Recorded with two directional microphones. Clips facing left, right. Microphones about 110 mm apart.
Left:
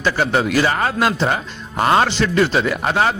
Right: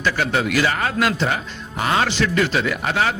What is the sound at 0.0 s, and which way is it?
A man's voice, 30° left (ahead or behind).